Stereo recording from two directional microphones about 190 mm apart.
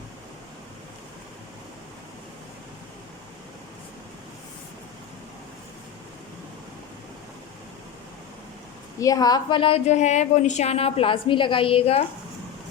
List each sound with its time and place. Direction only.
9.0 s a woman's voice: 20° left (ahead or behind)